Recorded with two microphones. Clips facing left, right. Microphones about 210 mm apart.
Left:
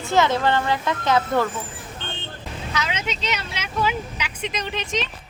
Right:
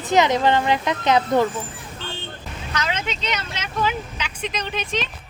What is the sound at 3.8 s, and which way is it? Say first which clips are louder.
Speech: even; 5° left (ahead or behind).